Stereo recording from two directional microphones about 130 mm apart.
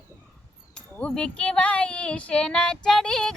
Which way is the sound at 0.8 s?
10° left (ahead or behind).